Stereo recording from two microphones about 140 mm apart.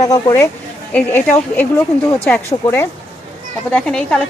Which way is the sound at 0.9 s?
10° left (ahead or behind).